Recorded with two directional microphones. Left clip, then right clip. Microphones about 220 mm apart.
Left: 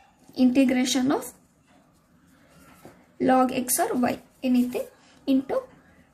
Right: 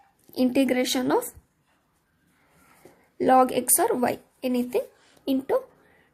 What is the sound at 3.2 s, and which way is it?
Speech, 30° right (ahead or behind).